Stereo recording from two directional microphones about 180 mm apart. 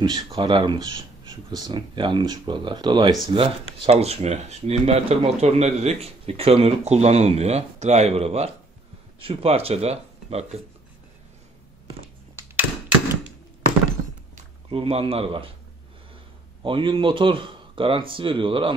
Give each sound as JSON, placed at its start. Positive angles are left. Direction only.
{"t": 0.0, "sound": "speech", "side_deg": -25}
{"t": 14.3, "sound": "speech", "side_deg": -35}
{"t": 16.6, "sound": "speech", "side_deg": -30}